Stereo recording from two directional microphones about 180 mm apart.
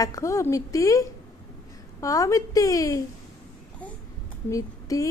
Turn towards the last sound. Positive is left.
turn(degrees=20)  # may be behind; listen again after turning